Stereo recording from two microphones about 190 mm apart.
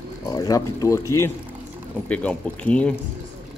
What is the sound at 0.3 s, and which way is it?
Speech, 20° left (ahead or behind).